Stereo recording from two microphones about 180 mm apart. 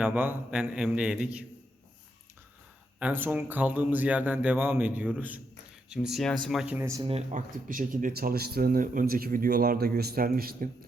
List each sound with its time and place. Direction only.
0.0 s a man's voice: 10° right (ahead or behind)
3.0 s a man's voice: 10° right (ahead or behind)
7.0 s speech: 35° right (ahead or behind); by 10.7 s 55° right (ahead or behind)